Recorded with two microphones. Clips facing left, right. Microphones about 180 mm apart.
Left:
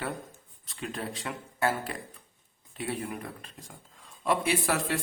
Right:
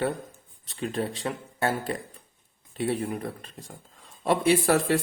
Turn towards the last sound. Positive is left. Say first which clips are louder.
# right 7 dB
turn(degrees=-35)  # may be behind; listen again after turning